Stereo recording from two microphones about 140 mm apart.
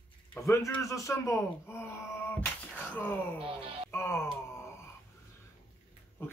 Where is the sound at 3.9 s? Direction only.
15° left (ahead or behind).